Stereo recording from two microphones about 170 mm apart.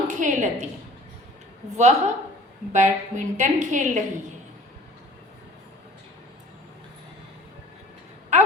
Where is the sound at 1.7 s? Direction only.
40° right (ahead or behind).